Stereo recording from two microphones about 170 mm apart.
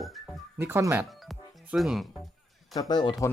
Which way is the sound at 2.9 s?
25° left (ahead or behind).